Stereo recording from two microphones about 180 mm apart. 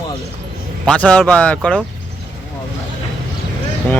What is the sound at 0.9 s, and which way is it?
Speech, 5° left (ahead or behind).